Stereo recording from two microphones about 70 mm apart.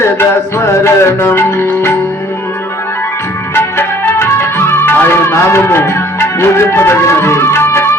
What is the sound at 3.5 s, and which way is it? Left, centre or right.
Music, left.